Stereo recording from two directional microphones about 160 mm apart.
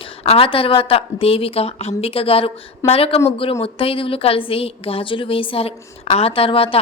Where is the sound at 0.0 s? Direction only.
35° left (ahead or behind).